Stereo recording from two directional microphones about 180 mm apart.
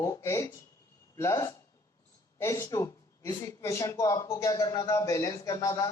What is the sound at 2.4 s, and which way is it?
Speech, 20° left (ahead or behind).